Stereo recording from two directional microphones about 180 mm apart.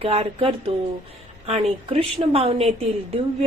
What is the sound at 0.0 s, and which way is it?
Speech, 35° right (ahead or behind).